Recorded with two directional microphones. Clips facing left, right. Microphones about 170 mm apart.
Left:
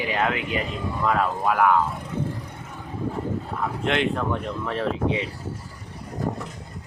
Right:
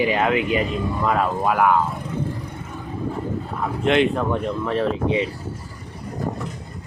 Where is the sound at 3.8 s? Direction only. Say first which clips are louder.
Right 6 dB; 15° right (ahead or behind).